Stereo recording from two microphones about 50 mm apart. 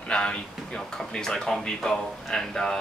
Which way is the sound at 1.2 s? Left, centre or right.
Centre.